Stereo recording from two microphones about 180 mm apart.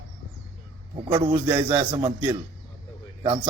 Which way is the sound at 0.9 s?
25° right (ahead or behind).